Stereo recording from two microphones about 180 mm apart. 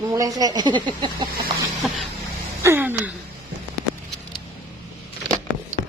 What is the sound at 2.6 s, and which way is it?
Gasp, 10° right (ahead or behind).